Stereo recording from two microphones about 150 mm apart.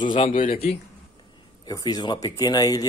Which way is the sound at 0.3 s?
70° left (ahead or behind).